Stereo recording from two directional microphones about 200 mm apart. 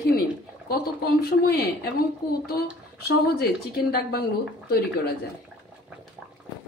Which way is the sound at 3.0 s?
50° left (ahead or behind).